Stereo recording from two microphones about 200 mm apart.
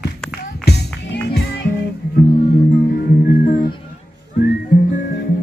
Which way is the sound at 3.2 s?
40° left (ahead or behind).